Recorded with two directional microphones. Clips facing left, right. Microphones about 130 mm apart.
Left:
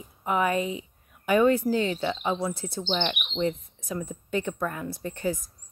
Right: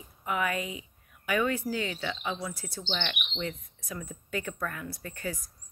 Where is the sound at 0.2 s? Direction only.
30° left (ahead or behind).